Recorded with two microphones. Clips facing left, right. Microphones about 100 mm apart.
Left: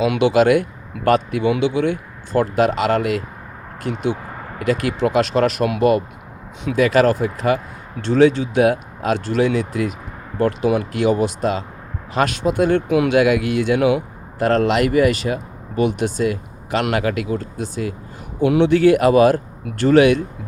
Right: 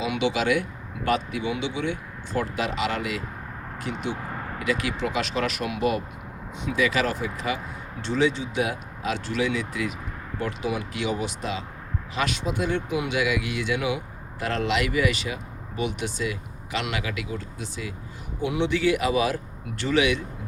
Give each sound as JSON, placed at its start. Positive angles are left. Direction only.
{"t": 0.2, "sound": "speech", "side_deg": 45}
{"t": 3.9, "sound": "speech", "side_deg": 45}
{"t": 5.6, "sound": "speech", "side_deg": 55}